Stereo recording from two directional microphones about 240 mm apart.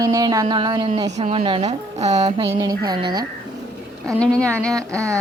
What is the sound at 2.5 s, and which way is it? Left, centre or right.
Speech, centre.